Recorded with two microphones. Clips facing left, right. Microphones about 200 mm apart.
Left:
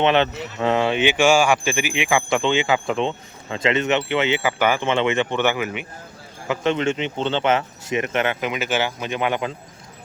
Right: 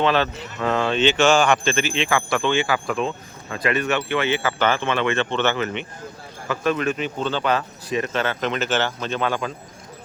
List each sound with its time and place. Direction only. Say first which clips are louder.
0.0 s speech: left 2 dB; 20° left (ahead or behind)
6.5 s speech: left 1 dB; 20° left (ahead or behind)